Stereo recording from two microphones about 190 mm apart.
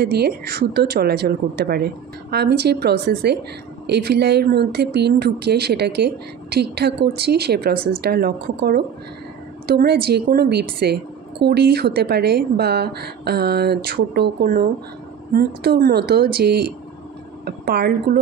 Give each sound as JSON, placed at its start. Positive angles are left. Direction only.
{"t": 0.0, "sound": "speech", "side_deg": -55}